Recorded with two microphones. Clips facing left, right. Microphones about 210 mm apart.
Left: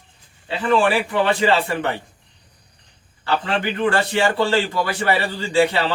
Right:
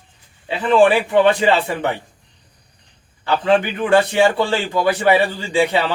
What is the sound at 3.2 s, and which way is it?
A man's voice, 15° right (ahead or behind).